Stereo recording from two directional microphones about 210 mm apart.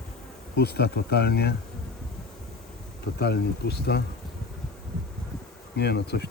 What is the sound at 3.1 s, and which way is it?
Speech, 50° left (ahead or behind).